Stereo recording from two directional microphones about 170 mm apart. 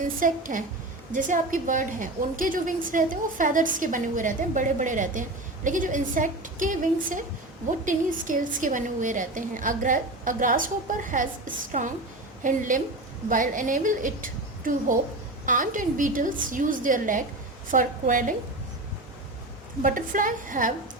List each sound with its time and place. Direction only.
0.0 s a woman's voice: 55° right (ahead or behind)
19.8 s a woman's voice: 50° right (ahead or behind)